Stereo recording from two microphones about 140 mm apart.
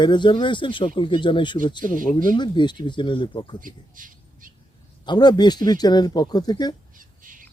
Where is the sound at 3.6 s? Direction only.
75° right (ahead or behind).